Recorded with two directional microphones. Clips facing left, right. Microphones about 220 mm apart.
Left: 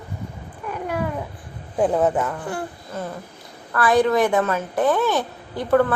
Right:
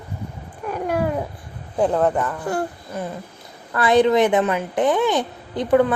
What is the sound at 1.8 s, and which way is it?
Speech, 5° left (ahead or behind).